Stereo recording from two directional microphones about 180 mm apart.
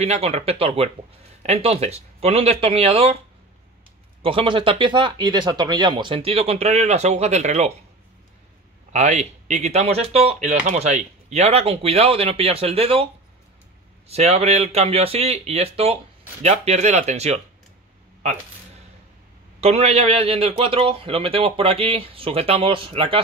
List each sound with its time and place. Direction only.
0.0 s speech: 35° right (ahead or behind)
4.2 s speech: 30° right (ahead or behind)
8.9 s speech: 40° right (ahead or behind)
19.6 s speech: 35° right (ahead or behind)